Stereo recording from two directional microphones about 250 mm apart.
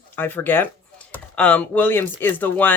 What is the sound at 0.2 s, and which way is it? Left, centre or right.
Speech, centre.